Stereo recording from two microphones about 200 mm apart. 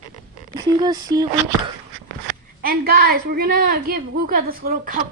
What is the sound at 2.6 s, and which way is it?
A woman's voice, 45° right (ahead or behind).